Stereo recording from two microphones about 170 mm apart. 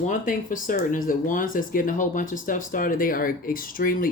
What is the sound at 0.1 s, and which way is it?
Speech, 50° left (ahead or behind).